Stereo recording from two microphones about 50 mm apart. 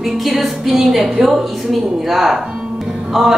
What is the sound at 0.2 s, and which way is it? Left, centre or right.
A woman's voice, centre.